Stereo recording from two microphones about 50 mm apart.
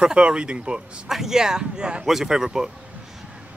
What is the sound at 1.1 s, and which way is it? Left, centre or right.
Speech, centre.